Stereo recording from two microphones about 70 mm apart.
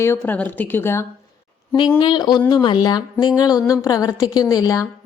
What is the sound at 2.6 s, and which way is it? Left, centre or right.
A woman's voice, left.